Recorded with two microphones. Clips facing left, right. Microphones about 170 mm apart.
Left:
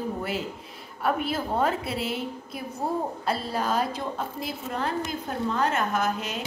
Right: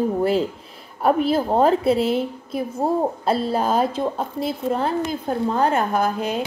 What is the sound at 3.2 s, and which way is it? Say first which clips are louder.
A woman's voice: right 7 dB; 30° right (ahead or behind).